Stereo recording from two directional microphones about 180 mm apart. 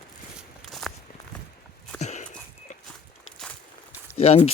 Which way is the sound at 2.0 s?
40° left (ahead or behind).